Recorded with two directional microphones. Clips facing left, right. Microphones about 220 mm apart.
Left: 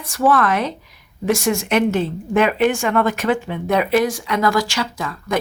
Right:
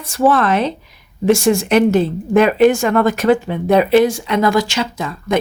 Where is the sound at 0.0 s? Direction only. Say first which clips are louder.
Right 3 dB; 25° right (ahead or behind).